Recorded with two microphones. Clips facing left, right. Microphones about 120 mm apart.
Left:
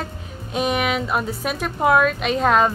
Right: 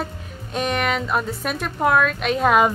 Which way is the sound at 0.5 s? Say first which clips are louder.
Left 1 dB; 5° left (ahead or behind).